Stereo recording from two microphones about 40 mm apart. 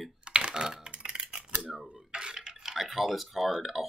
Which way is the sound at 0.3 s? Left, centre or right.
Right.